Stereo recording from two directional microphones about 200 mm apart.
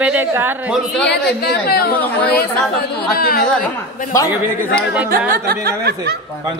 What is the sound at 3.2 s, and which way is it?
Speech, 50° left (ahead or behind).